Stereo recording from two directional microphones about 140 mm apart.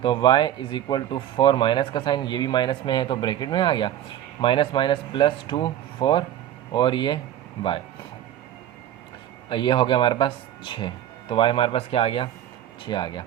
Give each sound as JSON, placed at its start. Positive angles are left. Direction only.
{"t": 0.0, "sound": "speech", "side_deg": 35}
{"t": 9.5, "sound": "speech", "side_deg": 35}